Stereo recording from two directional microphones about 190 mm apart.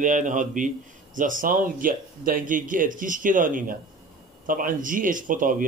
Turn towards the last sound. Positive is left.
turn(degrees=-45)  # may be behind; listen again after turning